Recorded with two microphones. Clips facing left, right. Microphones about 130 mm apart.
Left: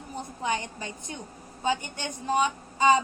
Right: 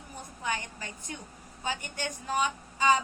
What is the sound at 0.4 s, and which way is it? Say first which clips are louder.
A woman's voice: left 4 dB; 20° left (ahead or behind).